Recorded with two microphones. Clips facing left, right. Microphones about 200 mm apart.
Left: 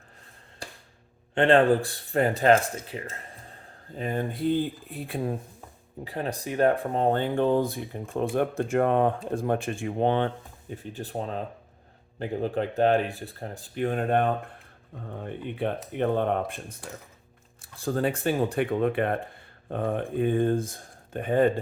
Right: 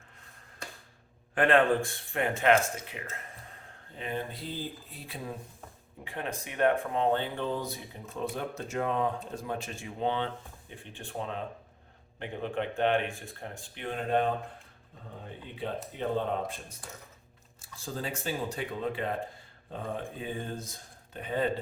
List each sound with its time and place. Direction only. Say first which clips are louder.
0.6 s a sound: left 2 dB; 30° left (ahead or behind)
1.4 s speech: left 5 dB; 30° left (ahead or behind); by 5.4 s 50° left (ahead or behind)
6.1 s speech: left 6 dB; 35° left (ahead or behind)